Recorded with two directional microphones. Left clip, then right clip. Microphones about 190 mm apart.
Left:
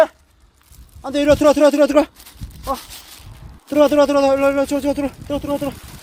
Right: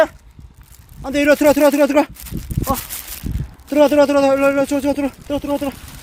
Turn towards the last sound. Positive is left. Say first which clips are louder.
# right 1 dB
turn(degrees=-20)  # may be behind; listen again after turning